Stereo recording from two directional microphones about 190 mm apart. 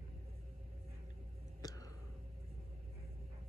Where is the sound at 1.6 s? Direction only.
20° left (ahead or behind).